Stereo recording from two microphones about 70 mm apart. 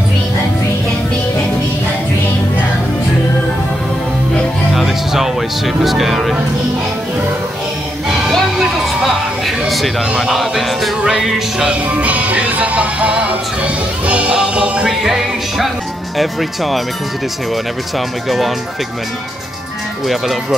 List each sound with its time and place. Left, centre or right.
4.7 s music: centre
8.3 s music: centre
11.6 s music: centre
15.0 s music: centre
17.9 s music: centre